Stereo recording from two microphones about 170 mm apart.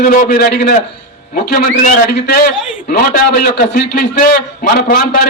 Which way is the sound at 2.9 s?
60° left (ahead or behind).